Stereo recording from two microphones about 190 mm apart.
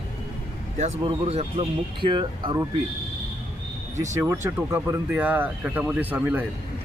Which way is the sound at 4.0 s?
15° right (ahead or behind).